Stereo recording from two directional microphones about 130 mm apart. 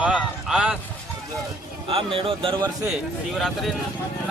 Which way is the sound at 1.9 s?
45° right (ahead or behind).